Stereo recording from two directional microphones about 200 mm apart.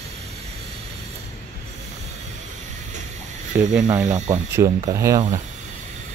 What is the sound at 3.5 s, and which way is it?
Speech, 10° right (ahead or behind).